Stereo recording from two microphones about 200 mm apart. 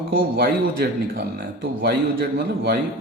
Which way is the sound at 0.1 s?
45° right (ahead or behind).